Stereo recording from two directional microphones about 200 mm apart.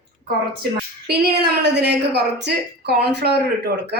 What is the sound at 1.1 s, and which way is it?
A woman's voice, 55° right (ahead or behind).